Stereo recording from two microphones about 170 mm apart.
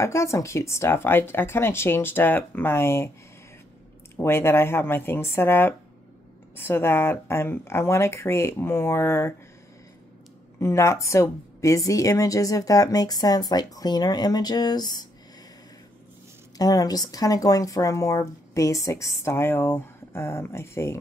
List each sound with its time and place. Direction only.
0.0 s speech: 15° left (ahead or behind)
4.2 s speech: 15° left (ahead or behind)
10.6 s speech: 15° left (ahead or behind)
16.5 s speech: 20° left (ahead or behind)